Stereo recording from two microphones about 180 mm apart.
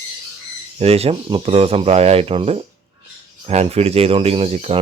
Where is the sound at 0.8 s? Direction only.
35° right (ahead or behind).